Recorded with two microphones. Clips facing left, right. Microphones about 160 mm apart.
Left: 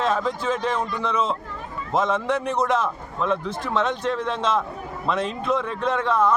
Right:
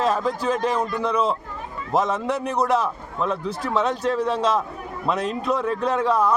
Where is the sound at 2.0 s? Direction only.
10° right (ahead or behind).